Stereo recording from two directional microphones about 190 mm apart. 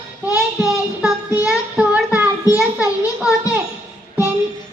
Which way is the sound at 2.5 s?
10° right (ahead or behind).